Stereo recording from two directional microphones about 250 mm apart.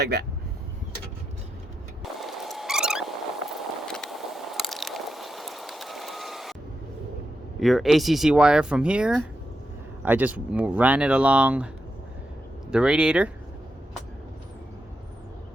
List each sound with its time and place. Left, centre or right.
0.0 s speech: right
2.1 s a sound: centre
7.6 s speech: centre
12.7 s speech: centre